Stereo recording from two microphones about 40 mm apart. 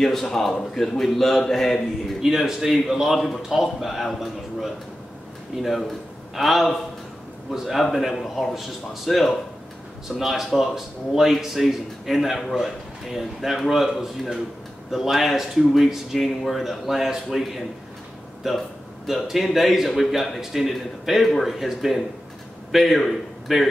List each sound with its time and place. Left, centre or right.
0.0 s a man's voice: centre
2.2 s a man's voice: centre
18.4 s a sound: centre
19.2 s a man's voice: centre